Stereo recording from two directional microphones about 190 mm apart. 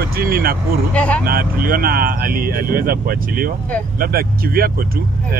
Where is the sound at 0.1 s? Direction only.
50° right (ahead or behind).